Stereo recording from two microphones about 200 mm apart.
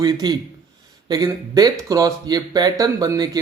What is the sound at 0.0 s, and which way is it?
Speech, 20° right (ahead or behind).